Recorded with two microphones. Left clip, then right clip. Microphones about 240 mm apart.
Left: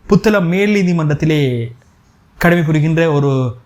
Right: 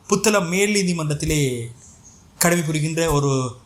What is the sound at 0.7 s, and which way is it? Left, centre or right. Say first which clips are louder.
Speech: left 6 dB; left.